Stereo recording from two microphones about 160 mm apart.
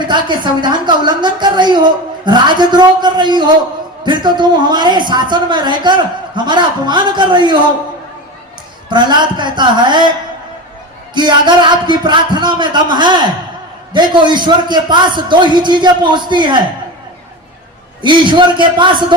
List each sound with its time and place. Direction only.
0.0 s a man's voice: 30° right (ahead or behind)
8.9 s a man's voice: 30° right (ahead or behind)
11.1 s a man's voice: 30° right (ahead or behind)
18.0 s a man's voice: 30° right (ahead or behind)